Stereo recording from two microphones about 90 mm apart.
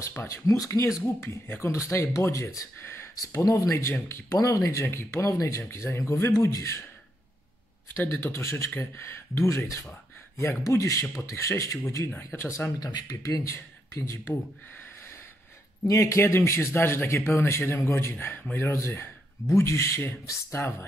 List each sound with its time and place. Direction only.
0.3 s speech: 35° left (ahead or behind)
4.4 s speech: 35° left (ahead or behind)
7.9 s speech: 25° left (ahead or behind)
12.7 s speech: 45° left (ahead or behind)
15.9 s speech: 35° left (ahead or behind)